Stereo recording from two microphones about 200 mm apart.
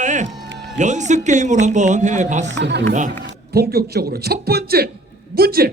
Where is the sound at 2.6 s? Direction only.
60° right (ahead or behind).